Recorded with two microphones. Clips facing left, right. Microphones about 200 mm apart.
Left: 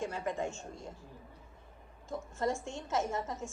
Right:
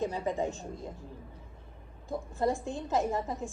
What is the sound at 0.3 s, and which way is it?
Speech, 20° right (ahead or behind).